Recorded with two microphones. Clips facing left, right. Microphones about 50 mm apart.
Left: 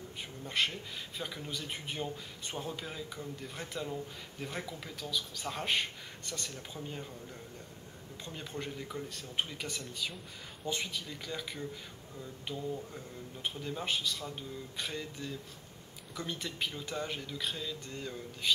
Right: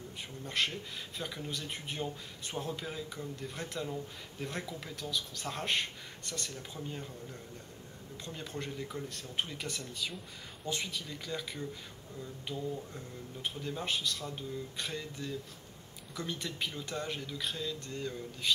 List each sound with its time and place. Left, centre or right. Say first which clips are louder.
0.5 s speech: left 1 dB; centre
8.3 s speech: even; centre